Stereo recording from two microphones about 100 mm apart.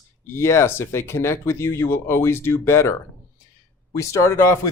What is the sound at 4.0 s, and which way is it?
Speech, 30° left (ahead or behind).